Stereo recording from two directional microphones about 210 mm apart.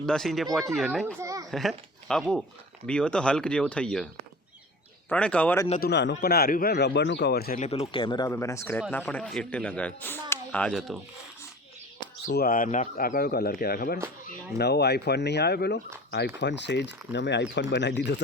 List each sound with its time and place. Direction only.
0.0 s speech: centre (ahead or behind)
1.2 s a sound: 15° right (ahead or behind)
1.5 s speech: centre (ahead or behind)
5.8 s speech: 55° left (ahead or behind)
7.7 s speech: 25° left (ahead or behind)
8.3 s speech: 15° left (ahead or behind)
12.3 s speech: 45° left (ahead or behind)